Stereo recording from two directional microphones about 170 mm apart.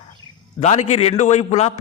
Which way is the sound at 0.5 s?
40° left (ahead or behind).